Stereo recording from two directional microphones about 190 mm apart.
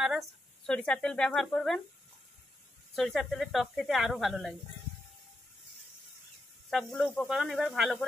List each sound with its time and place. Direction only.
0.0 s speech: centre (ahead or behind)
3.0 s speech: centre (ahead or behind)
6.7 s speech: centre (ahead or behind)